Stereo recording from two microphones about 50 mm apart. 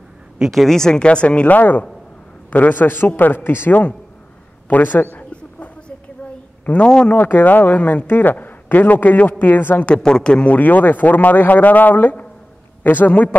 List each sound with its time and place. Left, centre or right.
0.5 s speech: centre; by 1.6 s left
1.6 s a man's voice: left
4.6 s a man's voice: left
6.6 s a man's voice: left
9.9 s speech: centre
10.5 s a man's voice: left